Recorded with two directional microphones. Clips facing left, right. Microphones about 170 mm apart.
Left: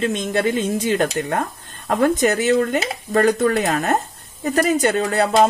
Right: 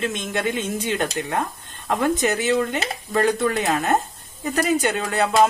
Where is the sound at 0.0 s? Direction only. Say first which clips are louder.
Left 5 dB; 35° left (ahead or behind).